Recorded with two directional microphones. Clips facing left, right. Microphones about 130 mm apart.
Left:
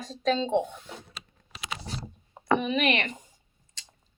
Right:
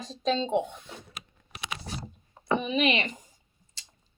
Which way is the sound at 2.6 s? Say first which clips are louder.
Even; 25° right (ahead or behind).